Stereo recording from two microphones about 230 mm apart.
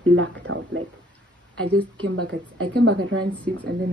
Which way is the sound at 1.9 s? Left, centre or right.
Right.